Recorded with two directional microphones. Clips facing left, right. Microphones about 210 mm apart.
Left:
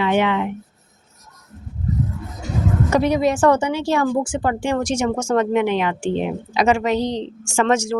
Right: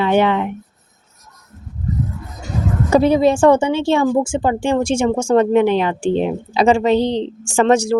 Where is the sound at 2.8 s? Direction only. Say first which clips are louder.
Right 6 dB; 30° right (ahead or behind).